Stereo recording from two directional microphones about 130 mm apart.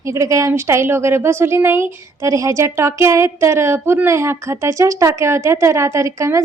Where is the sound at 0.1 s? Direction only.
25° right (ahead or behind).